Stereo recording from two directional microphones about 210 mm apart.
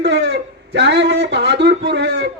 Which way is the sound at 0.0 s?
55° right (ahead or behind).